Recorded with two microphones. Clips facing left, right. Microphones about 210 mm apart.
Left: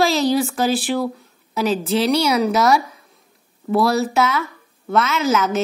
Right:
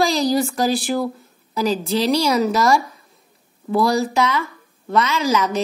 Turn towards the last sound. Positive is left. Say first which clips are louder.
# left 1 dB
turn(degrees=5)  # may be behind; listen again after turning